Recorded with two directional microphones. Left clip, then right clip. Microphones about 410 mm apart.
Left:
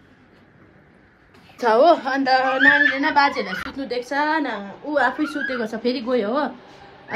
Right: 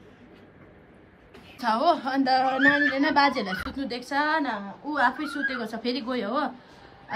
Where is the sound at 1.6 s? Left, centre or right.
Centre.